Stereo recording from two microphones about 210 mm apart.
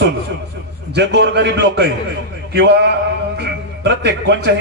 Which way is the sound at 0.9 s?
55° right (ahead or behind).